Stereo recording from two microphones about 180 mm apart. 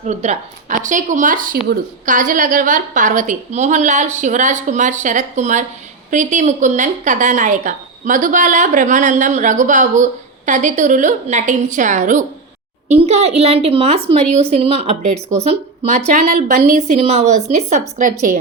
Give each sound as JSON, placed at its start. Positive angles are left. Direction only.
{"t": 0.0, "sound": "a woman's voice", "side_deg": -40}